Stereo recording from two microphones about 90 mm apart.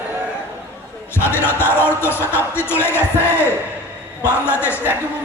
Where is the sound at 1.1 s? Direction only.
25° left (ahead or behind).